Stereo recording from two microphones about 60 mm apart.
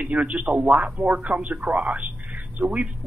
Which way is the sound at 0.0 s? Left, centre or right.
Right.